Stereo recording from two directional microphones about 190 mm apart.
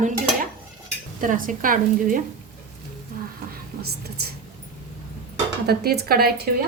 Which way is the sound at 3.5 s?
55° right (ahead or behind).